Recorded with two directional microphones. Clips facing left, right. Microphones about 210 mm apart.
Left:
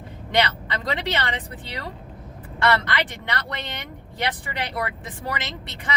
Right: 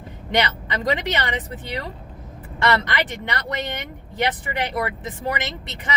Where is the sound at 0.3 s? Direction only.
15° right (ahead or behind).